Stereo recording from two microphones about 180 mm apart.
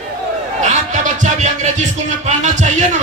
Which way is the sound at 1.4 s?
40° right (ahead or behind).